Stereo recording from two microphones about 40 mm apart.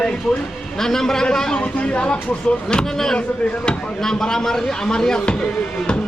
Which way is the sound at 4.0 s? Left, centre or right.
Centre.